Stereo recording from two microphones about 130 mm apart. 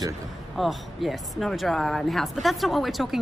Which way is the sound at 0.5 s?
Centre (ahead or behind).